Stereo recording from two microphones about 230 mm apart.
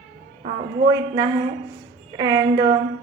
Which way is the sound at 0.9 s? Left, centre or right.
Centre.